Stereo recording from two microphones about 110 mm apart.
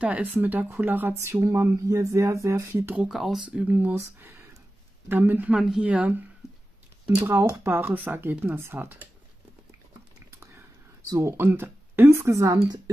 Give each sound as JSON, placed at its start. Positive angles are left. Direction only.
{"t": 0.0, "sound": "speech", "side_deg": -10}
{"t": 3.1, "sound": "speech", "side_deg": 0}
{"t": 3.4, "sound": "speech", "side_deg": -15}
{"t": 7.2, "sound": "speech", "side_deg": -20}
{"t": 11.1, "sound": "speech", "side_deg": -25}
{"t": 12.6, "sound": "speech", "side_deg": -40}